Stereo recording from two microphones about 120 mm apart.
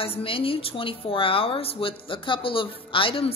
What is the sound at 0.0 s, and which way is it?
A woman's voice, 50° left (ahead or behind).